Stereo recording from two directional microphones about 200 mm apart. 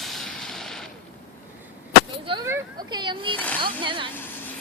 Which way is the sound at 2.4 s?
15° right (ahead or behind).